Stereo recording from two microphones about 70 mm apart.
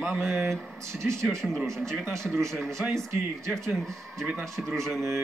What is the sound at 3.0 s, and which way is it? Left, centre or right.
Speech, centre.